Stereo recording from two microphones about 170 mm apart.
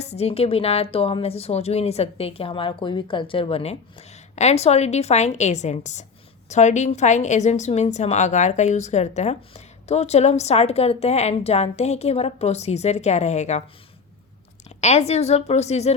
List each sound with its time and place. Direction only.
0.0 s a woman's voice: 40° left (ahead or behind)
14.8 s a woman's voice: 40° left (ahead or behind)